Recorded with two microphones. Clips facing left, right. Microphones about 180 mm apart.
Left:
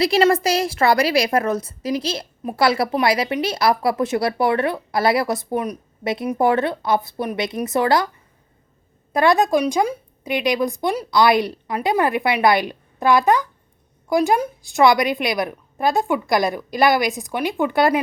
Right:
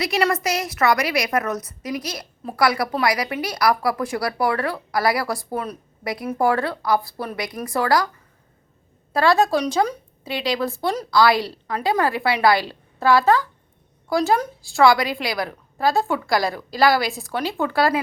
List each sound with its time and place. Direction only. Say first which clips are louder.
0.0 s a woman's voice: left 5 dB; 30° left (ahead or behind)
9.1 s a woman's voice: left 2 dB; 20° left (ahead or behind)